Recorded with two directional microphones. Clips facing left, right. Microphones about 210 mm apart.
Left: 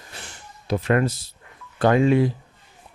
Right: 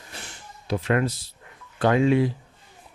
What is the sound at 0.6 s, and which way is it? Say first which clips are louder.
Speech: left 3 dB; 45° left (ahead or behind).